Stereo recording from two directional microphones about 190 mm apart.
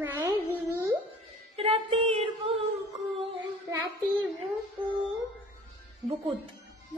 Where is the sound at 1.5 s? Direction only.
30° right (ahead or behind).